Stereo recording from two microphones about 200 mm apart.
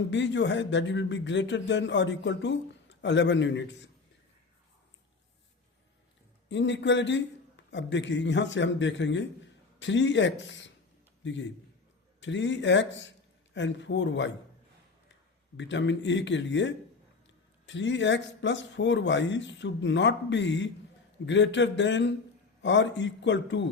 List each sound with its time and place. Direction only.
0.1 s speech: 60° left (ahead or behind)
6.5 s a man's voice: 65° left (ahead or behind)
15.5 s speech: 65° left (ahead or behind)